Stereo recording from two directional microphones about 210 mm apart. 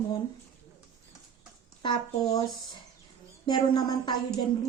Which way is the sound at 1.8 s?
25° left (ahead or behind).